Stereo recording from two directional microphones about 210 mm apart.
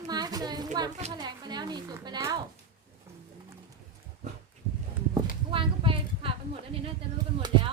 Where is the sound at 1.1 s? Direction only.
20° right (ahead or behind).